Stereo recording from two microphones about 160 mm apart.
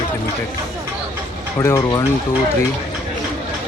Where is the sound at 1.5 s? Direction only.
15° left (ahead or behind).